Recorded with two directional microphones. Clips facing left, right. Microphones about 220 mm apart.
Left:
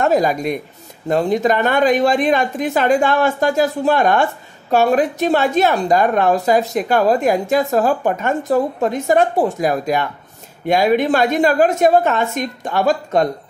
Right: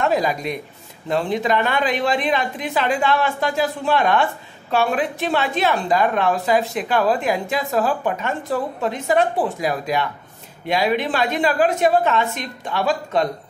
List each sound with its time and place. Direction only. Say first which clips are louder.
0.0 s a woman's voice: left 4 dB; 45° left (ahead or behind)